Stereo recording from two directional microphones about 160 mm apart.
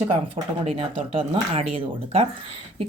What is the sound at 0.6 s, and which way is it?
A woman's voice, 40° right (ahead or behind).